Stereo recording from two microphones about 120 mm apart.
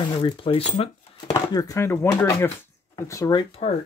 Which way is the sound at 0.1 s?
45° left (ahead or behind).